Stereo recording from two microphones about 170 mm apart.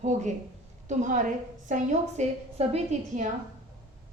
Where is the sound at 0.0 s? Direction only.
45° right (ahead or behind).